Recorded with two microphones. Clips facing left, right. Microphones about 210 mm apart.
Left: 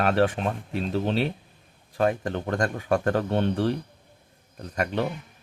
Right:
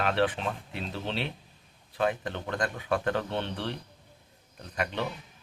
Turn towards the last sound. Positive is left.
turn(degrees=45)  # may be behind; listen again after turning